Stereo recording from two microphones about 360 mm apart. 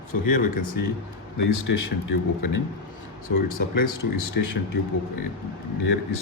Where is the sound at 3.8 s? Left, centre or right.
Left.